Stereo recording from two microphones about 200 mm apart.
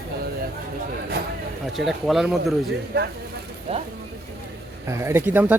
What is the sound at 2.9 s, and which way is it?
Speech, 55° right (ahead or behind).